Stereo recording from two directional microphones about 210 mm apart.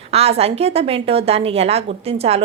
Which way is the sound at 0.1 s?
30° right (ahead or behind).